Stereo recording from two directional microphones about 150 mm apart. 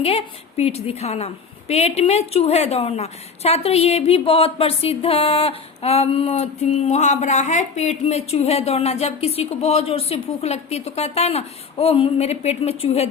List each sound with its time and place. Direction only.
0.0 s a woman's voice: 40° left (ahead or behind)